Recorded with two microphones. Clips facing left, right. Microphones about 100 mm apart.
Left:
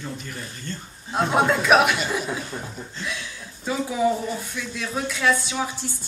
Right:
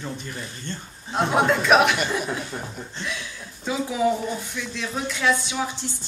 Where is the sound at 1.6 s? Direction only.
10° left (ahead or behind).